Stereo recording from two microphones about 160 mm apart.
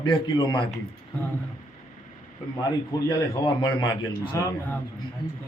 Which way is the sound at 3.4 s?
30° left (ahead or behind).